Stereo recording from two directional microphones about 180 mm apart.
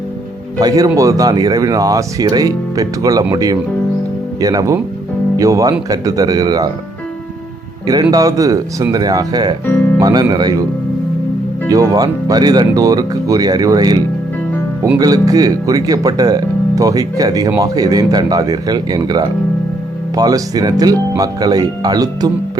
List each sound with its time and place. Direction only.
0.6 s speech: 20° right (ahead or behind)
8.1 s speech: 20° right (ahead or behind)
9.6 s speech: 10° left (ahead or behind)
10.0 s speech: 20° right (ahead or behind)
11.7 s speech: 20° right (ahead or behind)